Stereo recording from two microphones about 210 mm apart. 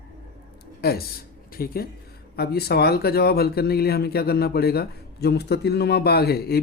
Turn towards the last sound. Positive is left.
turn(degrees=50)  # may be behind; listen again after turning